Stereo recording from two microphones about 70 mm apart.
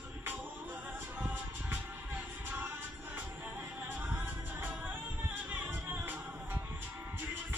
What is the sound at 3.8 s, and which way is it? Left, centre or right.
Music, right.